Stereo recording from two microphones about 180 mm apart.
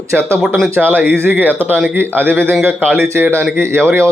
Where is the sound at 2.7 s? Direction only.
5° left (ahead or behind).